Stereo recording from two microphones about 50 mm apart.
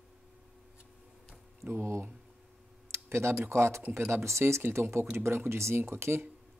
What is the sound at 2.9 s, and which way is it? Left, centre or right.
Tick-tock, right.